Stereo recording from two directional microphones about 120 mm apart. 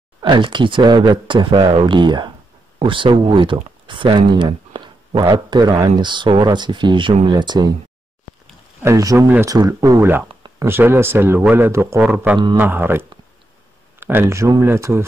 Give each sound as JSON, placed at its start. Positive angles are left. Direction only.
{"t": 0.2, "sound": "speech", "side_deg": -40}
{"t": 8.8, "sound": "speech", "side_deg": -25}